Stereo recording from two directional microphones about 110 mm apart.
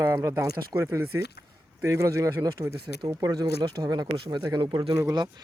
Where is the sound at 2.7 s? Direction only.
45° right (ahead or behind).